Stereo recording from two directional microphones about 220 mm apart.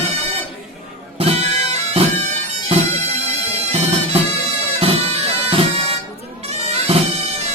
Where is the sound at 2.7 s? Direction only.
25° right (ahead or behind).